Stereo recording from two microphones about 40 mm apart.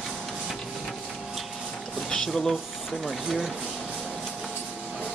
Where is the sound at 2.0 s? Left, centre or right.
Centre.